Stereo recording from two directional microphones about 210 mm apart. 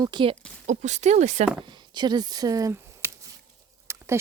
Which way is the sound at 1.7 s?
20° right (ahead or behind).